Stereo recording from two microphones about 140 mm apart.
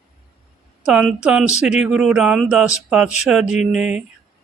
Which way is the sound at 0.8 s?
5° right (ahead or behind).